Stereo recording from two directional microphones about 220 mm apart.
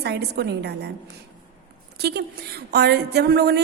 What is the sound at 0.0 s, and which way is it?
Speech, 50° right (ahead or behind).